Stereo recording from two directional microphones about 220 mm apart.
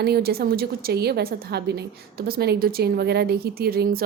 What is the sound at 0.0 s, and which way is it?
A woman's voice, 45° right (ahead or behind).